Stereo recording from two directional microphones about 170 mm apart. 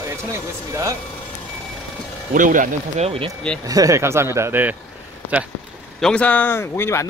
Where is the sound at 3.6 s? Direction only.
20° right (ahead or behind).